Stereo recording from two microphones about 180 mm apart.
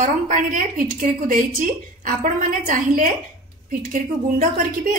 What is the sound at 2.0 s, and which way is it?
A woman's voice, 45° right (ahead or behind).